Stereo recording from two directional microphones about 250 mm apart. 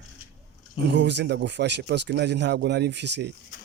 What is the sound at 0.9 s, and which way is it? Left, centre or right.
Speech, right.